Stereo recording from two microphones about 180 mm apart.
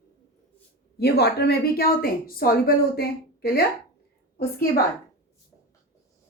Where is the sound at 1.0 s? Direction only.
65° left (ahead or behind).